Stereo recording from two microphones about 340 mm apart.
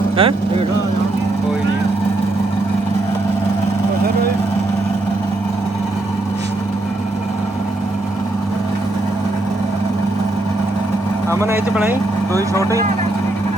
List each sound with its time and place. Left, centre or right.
0.2 s speech: centre
11.3 s speech: centre